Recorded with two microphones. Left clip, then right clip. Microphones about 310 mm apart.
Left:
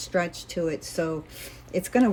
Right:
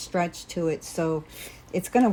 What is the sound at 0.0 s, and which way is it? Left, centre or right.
Speech, centre.